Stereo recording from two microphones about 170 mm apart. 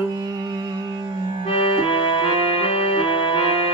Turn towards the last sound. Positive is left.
turn(degrees=30)  # may be behind; listen again after turning